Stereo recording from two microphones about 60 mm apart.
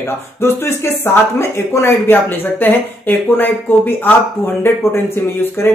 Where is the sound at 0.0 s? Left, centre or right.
Left.